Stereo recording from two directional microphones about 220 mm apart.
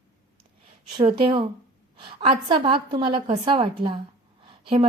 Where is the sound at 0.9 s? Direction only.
25° right (ahead or behind).